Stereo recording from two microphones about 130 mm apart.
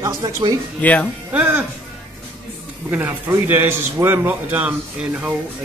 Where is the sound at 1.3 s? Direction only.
15° right (ahead or behind).